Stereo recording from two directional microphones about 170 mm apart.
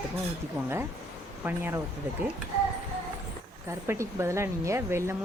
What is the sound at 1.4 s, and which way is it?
Speech, 10° right (ahead or behind).